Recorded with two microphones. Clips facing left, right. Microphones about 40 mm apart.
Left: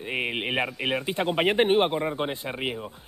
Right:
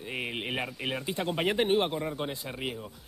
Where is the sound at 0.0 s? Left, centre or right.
Left.